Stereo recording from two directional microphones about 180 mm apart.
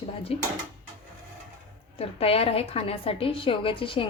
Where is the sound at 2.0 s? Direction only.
35° left (ahead or behind).